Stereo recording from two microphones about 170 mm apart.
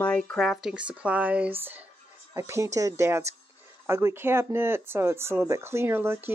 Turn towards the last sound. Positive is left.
turn(degrees=-15)  # may be behind; listen again after turning